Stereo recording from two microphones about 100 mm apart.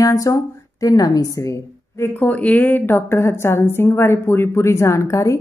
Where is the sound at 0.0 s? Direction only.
35° left (ahead or behind).